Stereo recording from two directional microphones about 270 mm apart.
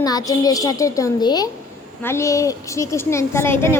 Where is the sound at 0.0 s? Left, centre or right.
Centre.